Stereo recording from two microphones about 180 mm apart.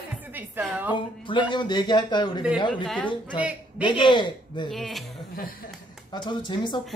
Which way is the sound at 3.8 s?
25° left (ahead or behind).